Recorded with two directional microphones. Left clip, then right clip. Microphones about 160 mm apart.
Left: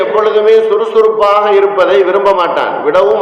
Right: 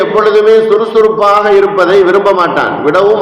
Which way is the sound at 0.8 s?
35° right (ahead or behind).